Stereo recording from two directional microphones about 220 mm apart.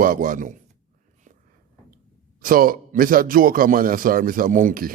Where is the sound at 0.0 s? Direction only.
40° right (ahead or behind).